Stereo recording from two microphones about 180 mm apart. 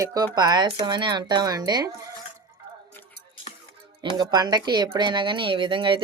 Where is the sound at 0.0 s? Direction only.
20° right (ahead or behind).